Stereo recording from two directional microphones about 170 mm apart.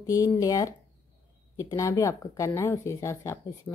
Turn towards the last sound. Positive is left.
turn(degrees=15)  # may be behind; listen again after turning